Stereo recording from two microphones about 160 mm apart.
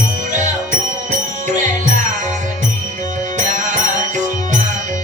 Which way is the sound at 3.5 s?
50° right (ahead or behind).